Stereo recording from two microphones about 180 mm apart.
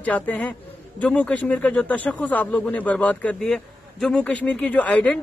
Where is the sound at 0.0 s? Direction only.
10° left (ahead or behind).